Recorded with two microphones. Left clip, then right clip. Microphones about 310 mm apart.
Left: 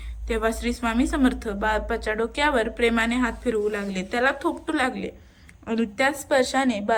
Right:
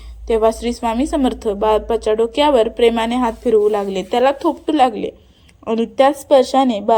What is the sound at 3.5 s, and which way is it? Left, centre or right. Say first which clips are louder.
Speech: right 14 dB; right.